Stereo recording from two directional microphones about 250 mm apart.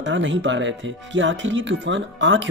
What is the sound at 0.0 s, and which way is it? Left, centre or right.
Speech, right.